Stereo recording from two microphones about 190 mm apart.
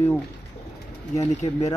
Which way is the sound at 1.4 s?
35° left (ahead or behind).